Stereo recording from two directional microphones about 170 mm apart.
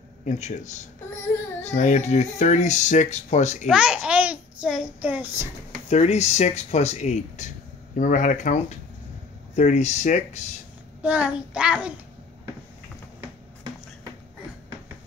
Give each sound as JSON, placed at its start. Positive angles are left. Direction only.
{"t": 0.2, "sound": "speech", "side_deg": 45}
{"t": 3.6, "sound": "a child's voice", "side_deg": -5}
{"t": 5.9, "sound": "speech", "side_deg": 40}
{"t": 11.0, "sound": "a child's voice", "side_deg": -5}